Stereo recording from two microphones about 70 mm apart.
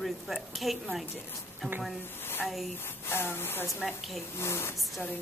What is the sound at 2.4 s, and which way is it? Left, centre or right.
Speech, centre.